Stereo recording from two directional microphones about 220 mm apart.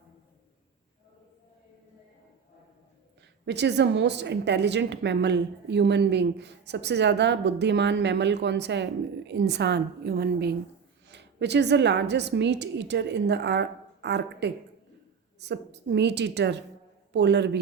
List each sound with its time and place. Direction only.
3.4 s a woman's voice: 50° right (ahead or behind)